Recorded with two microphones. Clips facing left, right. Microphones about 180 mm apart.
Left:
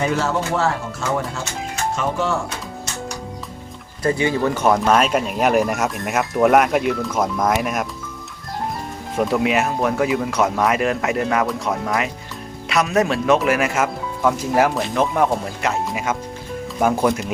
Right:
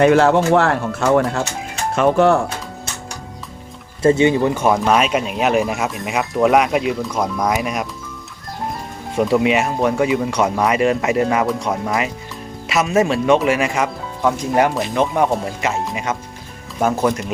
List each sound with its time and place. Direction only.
0.0 s speech: 65° right (ahead or behind)
4.0 s speech: 25° right (ahead or behind)
4.5 s speech: 10° right (ahead or behind)
9.1 s speech: centre (ahead or behind)